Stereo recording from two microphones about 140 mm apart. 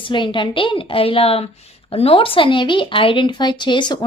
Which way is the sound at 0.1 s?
35° left (ahead or behind).